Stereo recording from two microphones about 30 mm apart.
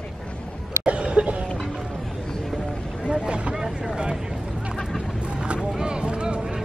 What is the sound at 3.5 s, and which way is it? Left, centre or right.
Vehicle, centre.